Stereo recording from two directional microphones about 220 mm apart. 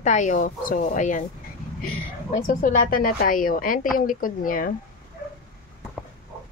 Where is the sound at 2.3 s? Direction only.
40° left (ahead or behind).